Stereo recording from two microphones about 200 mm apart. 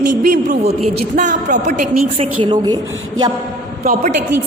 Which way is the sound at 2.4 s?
20° right (ahead or behind).